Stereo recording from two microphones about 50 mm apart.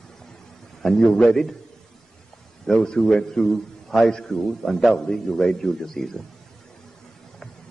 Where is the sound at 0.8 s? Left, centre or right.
Centre.